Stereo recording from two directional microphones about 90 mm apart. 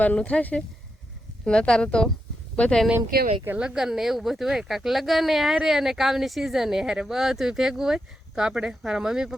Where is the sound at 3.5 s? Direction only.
10° right (ahead or behind).